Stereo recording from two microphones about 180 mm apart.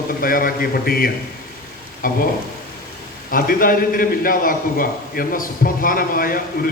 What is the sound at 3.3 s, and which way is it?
A man's voice, 50° left (ahead or behind).